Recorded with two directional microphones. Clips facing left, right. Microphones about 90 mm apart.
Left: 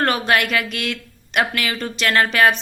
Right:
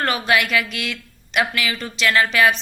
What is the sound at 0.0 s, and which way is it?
A woman's voice, 50° left (ahead or behind).